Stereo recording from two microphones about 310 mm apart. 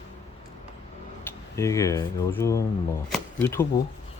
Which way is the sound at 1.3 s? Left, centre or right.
Centre.